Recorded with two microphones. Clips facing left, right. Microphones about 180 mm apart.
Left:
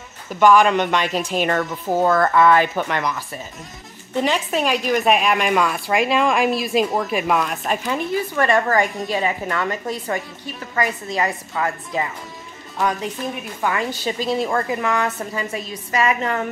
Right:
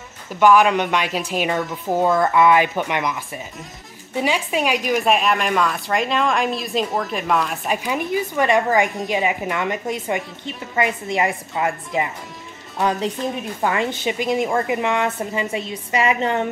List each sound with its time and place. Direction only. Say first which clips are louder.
0.4 s speech: even; 10° right (ahead or behind)
2.0 s speech: even; 15° right (ahead or behind)
5.0 s a woman's voice: left 1 dB; 5° left (ahead or behind); by 16.4 s 25° right (ahead or behind)